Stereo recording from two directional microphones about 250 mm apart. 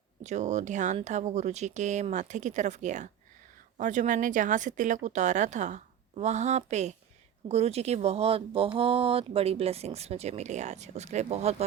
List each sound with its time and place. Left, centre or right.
0.2 s speech: right